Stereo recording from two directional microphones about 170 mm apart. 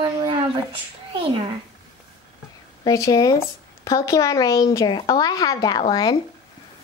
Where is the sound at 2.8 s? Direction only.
20° left (ahead or behind).